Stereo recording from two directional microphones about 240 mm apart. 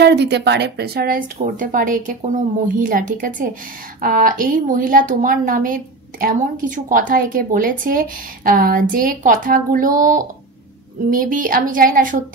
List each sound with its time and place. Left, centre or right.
0.0 s a woman's voice: right